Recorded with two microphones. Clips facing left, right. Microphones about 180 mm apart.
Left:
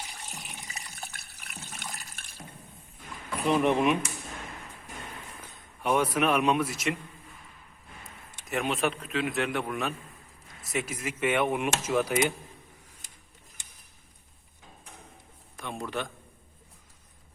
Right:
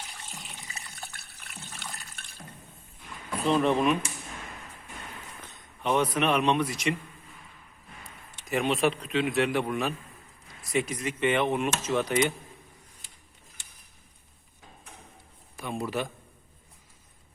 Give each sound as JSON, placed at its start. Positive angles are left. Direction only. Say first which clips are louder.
{"t": 1.4, "sound": "water", "louder": "left 1 dB", "side_deg": 5}
{"t": 3.4, "sound": "speech", "louder": "even", "side_deg": 15}
{"t": 5.4, "sound": "speech", "louder": "right 1 dB", "side_deg": 10}
{"t": 8.4, "sound": "speech", "louder": "right 3 dB", "side_deg": 0}
{"t": 15.5, "sound": "a man's voice", "louder": "right 3 dB", "side_deg": -5}